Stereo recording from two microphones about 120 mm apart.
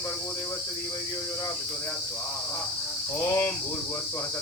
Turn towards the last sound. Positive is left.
turn(degrees=15)  # may be behind; listen again after turning